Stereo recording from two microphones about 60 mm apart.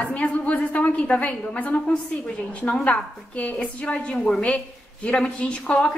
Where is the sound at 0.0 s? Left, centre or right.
Left.